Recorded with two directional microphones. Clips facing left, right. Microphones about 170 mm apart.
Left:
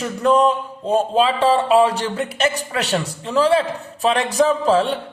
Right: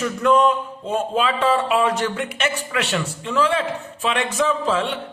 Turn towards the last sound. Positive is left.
turn(degrees=40)  # may be behind; listen again after turning